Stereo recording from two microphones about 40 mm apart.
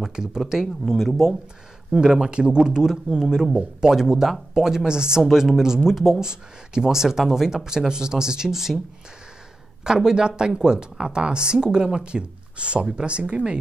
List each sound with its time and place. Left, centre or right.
0.0 s speech: centre
0.4 s speech: centre
1.9 s speech: right; by 6.2 s centre
6.2 s speech: centre
9.8 s speech: centre